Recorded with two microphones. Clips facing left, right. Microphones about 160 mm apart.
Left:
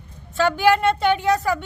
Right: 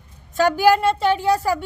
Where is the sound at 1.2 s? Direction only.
35° right (ahead or behind).